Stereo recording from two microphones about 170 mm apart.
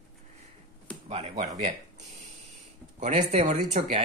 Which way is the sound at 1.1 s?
40° right (ahead or behind).